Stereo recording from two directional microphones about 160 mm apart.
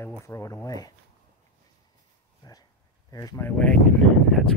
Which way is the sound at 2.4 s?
25° left (ahead or behind).